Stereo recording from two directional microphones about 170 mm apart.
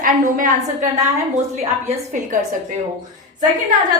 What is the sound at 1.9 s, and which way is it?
Speech, 50° right (ahead or behind).